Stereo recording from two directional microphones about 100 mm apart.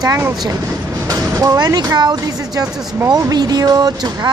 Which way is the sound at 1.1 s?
35° right (ahead or behind).